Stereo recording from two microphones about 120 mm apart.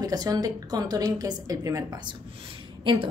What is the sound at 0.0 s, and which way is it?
A woman's voice, 30° right (ahead or behind).